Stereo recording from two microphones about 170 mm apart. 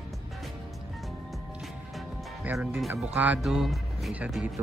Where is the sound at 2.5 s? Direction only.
10° right (ahead or behind).